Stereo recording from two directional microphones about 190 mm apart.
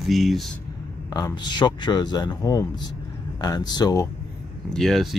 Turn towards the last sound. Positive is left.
turn(degrees=0)  # may be behind; listen again after turning